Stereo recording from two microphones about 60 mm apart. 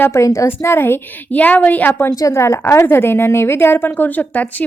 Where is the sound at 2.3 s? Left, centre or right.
Left.